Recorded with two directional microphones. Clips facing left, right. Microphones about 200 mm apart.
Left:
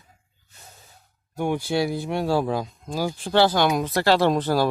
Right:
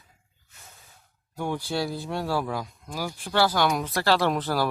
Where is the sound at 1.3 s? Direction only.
20° left (ahead or behind).